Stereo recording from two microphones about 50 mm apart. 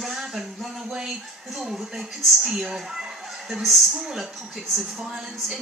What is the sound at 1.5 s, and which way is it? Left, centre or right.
Speech, centre.